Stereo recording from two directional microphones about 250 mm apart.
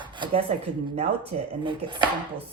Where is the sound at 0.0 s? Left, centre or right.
Centre.